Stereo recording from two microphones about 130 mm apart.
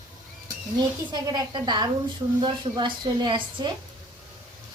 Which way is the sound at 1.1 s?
35° right (ahead or behind).